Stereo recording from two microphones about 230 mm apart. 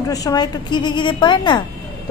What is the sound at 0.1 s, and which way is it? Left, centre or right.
A woman's voice, centre.